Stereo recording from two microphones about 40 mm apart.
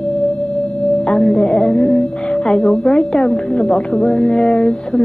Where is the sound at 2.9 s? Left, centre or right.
Centre.